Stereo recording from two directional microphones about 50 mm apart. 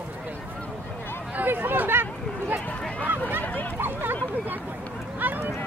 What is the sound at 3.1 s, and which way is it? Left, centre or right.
Speech, right.